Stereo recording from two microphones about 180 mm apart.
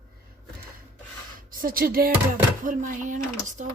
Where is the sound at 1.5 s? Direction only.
50° right (ahead or behind).